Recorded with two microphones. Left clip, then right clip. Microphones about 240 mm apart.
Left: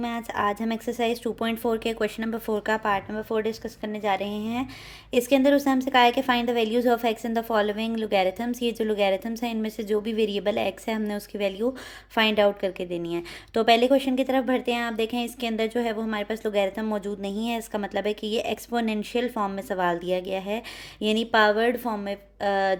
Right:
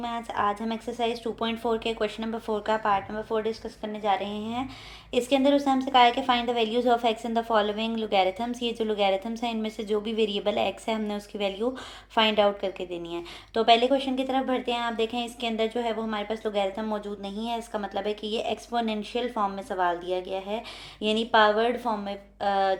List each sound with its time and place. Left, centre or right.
0.0 s a woman's voice: left